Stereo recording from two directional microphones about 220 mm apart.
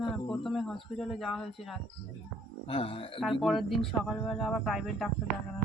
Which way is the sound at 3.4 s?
Centre (ahead or behind).